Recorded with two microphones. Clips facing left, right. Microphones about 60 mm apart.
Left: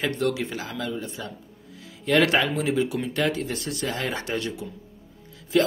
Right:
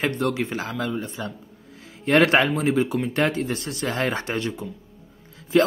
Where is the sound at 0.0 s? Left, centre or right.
Right.